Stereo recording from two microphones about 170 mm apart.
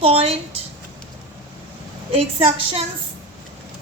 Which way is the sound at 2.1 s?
35° right (ahead or behind).